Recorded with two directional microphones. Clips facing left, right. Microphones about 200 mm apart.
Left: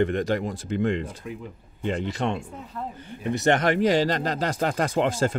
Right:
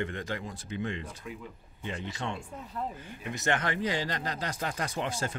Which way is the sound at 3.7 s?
90° left.